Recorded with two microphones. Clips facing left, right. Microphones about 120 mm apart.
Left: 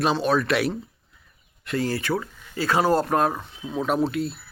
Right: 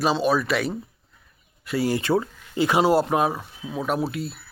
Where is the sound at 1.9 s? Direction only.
25° right (ahead or behind); by 4.4 s centre (ahead or behind).